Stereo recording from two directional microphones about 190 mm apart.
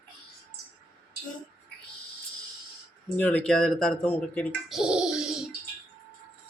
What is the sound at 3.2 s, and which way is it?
Speech, 5° left (ahead or behind).